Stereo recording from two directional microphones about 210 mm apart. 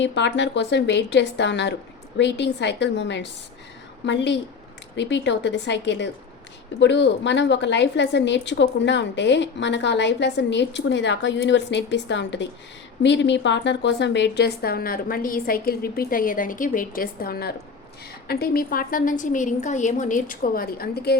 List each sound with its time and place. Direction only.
0.0 s a woman's voice: 60° left (ahead or behind)